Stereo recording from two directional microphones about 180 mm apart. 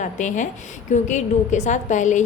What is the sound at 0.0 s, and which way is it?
A woman's voice, 45° left (ahead or behind).